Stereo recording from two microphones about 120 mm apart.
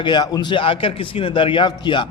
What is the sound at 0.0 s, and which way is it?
A man's voice, 35° left (ahead or behind).